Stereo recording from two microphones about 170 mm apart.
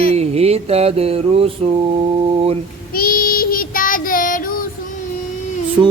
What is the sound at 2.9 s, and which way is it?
Child singing, 60° left (ahead or behind).